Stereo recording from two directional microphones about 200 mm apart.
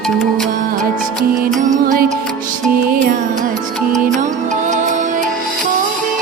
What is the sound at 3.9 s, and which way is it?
Music, 40° right (ahead or behind).